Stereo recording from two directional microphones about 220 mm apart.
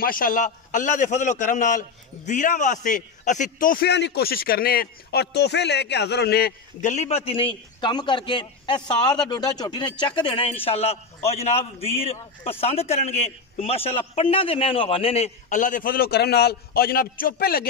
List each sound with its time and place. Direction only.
0.0 s a man's voice: 40° left (ahead or behind)